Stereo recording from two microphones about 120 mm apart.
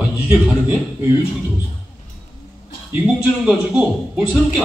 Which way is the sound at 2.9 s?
10° right (ahead or behind).